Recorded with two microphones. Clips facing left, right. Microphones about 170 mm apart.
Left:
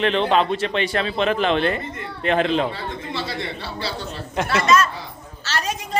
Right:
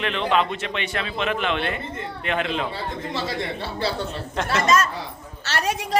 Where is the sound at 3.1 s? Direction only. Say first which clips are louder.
Right 1 dB; 50° right (ahead or behind).